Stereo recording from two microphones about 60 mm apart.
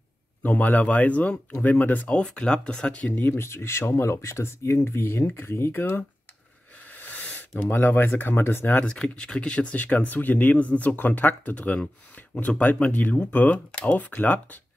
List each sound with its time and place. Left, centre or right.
0.4 s speech: left
2.0 s speech: centre
3.1 s speech: left
3.4 s speech: left
6.9 s speech: left
8.7 s speech: centre